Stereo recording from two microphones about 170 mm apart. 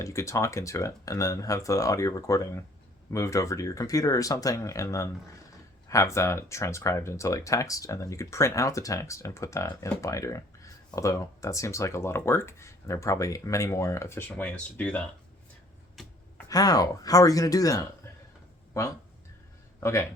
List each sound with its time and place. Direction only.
0.0 s speech: 20° left (ahead or behind)
16.0 s a sound: centre (ahead or behind)
16.5 s speech: 20° left (ahead or behind)